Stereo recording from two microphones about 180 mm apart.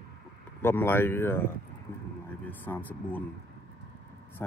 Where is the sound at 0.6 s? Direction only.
10° left (ahead or behind).